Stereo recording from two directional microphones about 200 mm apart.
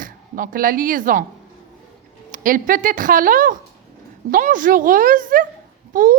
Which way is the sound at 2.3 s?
45° right (ahead or behind).